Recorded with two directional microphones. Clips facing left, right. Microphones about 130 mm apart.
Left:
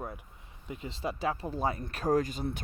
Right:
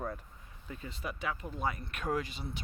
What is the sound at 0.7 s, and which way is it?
Speech, 25° left (ahead or behind).